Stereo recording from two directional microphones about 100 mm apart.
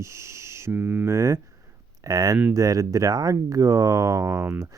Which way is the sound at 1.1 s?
30° right (ahead or behind).